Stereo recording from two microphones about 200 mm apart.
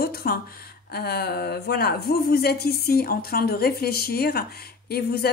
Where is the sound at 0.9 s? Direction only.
50° left (ahead or behind).